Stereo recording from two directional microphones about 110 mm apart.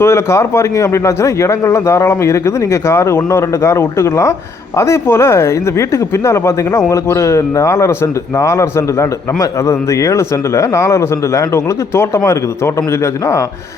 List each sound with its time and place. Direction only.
0.0 s speech: 25° left (ahead or behind)